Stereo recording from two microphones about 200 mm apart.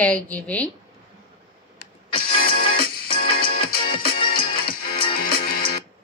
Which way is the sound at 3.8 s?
25° left (ahead or behind).